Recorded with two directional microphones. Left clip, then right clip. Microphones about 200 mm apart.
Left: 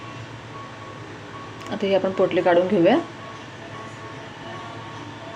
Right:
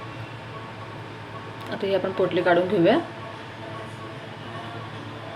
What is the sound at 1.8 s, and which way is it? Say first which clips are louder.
Speech: left 3 dB; 20° left (ahead or behind).